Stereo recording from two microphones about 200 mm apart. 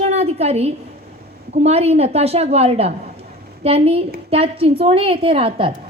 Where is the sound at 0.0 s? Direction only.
30° right (ahead or behind).